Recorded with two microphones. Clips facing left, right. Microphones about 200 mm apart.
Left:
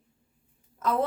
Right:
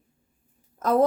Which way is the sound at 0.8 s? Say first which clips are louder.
Right 7 dB; 40° right (ahead or behind).